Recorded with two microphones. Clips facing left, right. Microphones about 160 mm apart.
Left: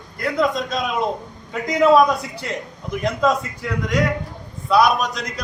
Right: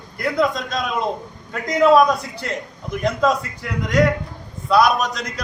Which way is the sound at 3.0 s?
Centre (ahead or behind).